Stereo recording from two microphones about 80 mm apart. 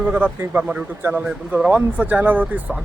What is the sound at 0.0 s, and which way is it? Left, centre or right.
A man's voice, centre.